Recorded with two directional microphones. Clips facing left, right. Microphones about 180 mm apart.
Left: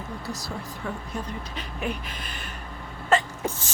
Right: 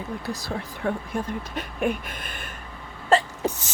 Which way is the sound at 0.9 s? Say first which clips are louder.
Right 7 dB; 50° right (ahead or behind).